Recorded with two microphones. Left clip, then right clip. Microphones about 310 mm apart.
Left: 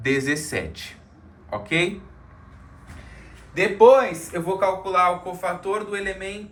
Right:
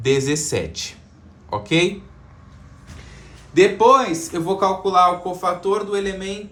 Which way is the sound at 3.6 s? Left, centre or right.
Right.